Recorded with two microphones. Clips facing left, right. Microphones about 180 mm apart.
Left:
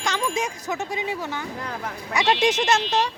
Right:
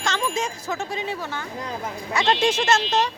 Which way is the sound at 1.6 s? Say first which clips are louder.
Right 1 dB; 20° right (ahead or behind).